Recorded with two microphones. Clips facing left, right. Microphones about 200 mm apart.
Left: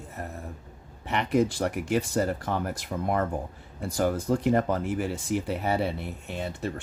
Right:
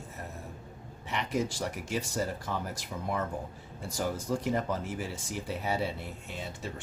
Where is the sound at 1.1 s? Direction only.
60° left (ahead or behind).